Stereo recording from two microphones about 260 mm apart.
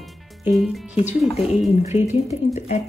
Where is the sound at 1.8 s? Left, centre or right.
Left.